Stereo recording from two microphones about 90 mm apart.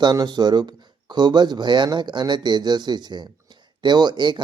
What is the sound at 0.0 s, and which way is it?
Speech, 55° right (ahead or behind).